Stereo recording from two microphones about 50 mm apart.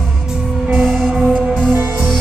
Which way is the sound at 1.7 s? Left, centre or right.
Right.